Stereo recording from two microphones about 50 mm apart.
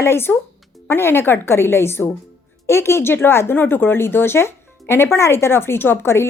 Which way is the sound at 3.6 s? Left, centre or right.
Left.